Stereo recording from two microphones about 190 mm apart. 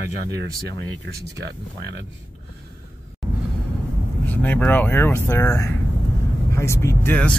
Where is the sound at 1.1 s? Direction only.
65° right (ahead or behind).